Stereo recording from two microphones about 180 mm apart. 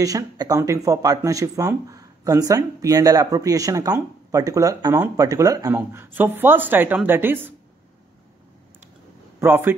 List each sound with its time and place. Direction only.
0.0 s speech: 20° right (ahead or behind)
9.4 s speech: 10° right (ahead or behind)